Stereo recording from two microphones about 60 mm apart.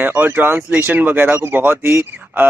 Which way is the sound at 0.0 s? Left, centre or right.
Right.